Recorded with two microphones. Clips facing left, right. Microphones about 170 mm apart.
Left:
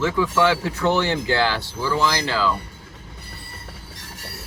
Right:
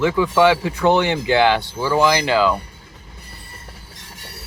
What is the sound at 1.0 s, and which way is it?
Speech, 15° right (ahead or behind).